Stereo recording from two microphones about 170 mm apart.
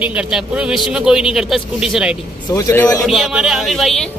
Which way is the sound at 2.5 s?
20° left (ahead or behind).